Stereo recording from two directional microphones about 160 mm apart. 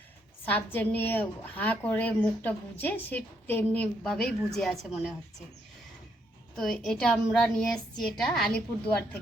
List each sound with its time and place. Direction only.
0.4 s a woman's voice: 10° left (ahead or behind)
6.6 s a woman's voice: 5° left (ahead or behind)